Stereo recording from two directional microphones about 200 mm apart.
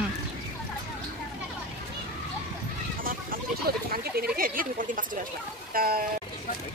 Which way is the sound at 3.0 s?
45° right (ahead or behind).